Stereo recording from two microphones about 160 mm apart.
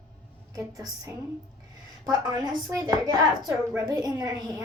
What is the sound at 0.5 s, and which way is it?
A woman's voice, 20° right (ahead or behind).